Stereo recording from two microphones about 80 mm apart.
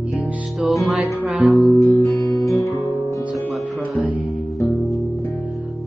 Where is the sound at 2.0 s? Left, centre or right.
Left.